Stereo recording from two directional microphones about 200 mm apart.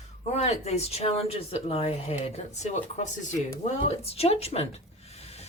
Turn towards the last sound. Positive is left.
turn(degrees=30)  # may be behind; listen again after turning